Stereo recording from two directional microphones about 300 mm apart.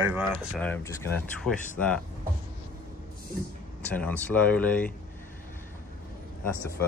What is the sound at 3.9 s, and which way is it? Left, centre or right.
Speech, centre.